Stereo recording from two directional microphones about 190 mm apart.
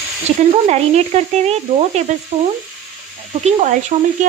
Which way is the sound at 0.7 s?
35° right (ahead or behind).